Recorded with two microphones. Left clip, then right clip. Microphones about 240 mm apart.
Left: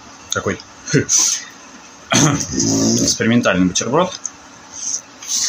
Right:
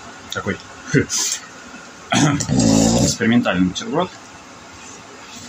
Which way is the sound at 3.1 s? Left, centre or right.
Centre.